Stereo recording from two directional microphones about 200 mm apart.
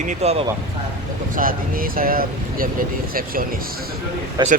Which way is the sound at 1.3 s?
45° right (ahead or behind).